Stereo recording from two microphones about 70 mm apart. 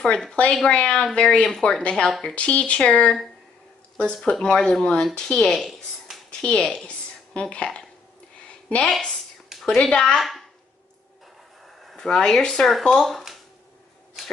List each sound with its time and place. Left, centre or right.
0.0 s speech: centre
2.0 s speech: centre
2.3 s a woman's voice: centre
9.5 s a sound: centre
9.8 s speech: centre
11.8 s speech: centre